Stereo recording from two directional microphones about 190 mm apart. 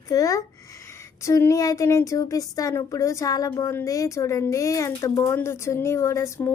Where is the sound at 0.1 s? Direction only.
15° left (ahead or behind).